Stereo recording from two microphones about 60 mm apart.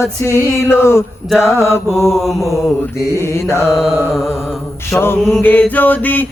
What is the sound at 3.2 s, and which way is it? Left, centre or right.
Music, left.